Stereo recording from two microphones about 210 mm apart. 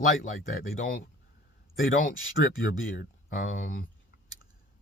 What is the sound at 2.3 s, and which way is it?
Speech, 45° left (ahead or behind).